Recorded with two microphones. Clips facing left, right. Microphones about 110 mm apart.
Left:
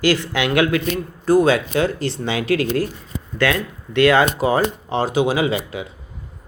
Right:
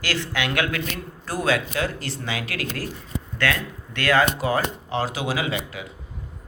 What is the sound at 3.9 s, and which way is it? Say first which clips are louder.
A man's voice: left 6 dB; 20° left (ahead or behind).